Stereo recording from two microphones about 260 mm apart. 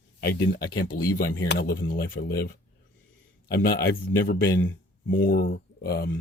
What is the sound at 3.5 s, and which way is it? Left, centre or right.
Speech, left.